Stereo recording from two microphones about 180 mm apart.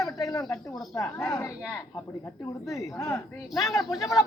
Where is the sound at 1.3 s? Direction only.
15° left (ahead or behind).